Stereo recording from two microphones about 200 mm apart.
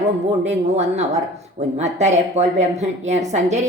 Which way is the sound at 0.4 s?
35° right (ahead or behind).